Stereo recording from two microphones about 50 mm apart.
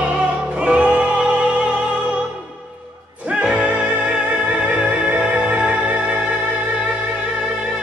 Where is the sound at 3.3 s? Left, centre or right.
Right.